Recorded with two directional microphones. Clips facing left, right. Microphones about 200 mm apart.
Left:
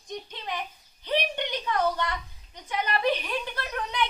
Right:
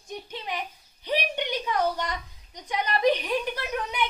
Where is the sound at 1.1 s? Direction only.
10° right (ahead or behind).